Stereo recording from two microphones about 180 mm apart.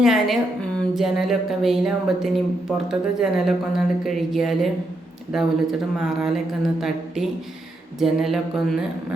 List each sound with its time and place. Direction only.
0.0 s speech: centre (ahead or behind)